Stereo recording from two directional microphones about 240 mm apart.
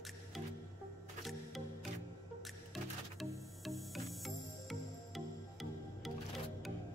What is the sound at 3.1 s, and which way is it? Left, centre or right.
Music, centre.